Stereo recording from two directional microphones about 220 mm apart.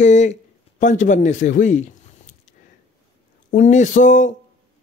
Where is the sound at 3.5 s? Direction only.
35° left (ahead or behind).